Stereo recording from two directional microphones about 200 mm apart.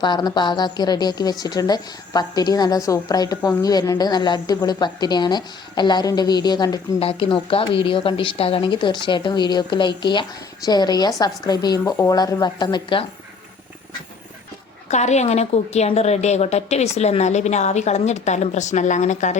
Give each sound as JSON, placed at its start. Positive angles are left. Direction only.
{"t": 0.0, "sound": "a woman's voice", "side_deg": 20}
{"t": 14.8, "sound": "a woman's voice", "side_deg": 35}